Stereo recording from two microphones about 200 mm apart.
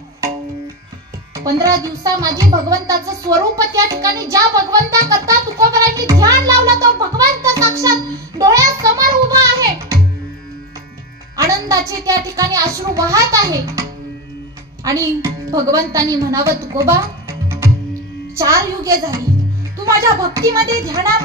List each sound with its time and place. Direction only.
1.3 s a child's voice: 15° right (ahead or behind)
12.0 s speech: 15° right (ahead or behind)
14.9 s a woman's voice: 15° right (ahead or behind)